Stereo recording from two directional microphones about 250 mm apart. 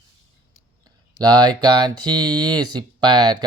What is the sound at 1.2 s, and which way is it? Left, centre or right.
Speech, centre.